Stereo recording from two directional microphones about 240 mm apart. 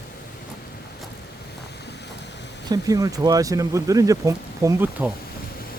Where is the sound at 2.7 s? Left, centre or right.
Centre.